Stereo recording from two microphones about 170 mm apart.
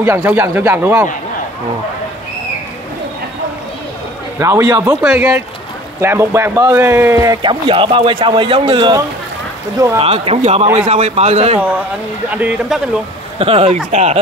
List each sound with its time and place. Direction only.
0.0 s speech: 15° right (ahead or behind)
4.4 s a man's voice: 15° right (ahead or behind); by 11.6 s 40° right (ahead or behind)
12.3 s speech: 10° right (ahead or behind)
13.4 s speech: 35° right (ahead or behind)